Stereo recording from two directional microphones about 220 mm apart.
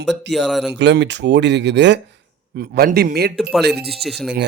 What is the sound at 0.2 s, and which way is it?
Speech, 55° right (ahead or behind).